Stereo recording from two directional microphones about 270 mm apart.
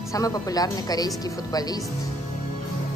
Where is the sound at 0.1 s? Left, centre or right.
Centre.